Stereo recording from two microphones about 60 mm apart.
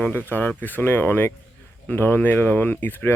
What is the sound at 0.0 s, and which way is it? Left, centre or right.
Speech, left.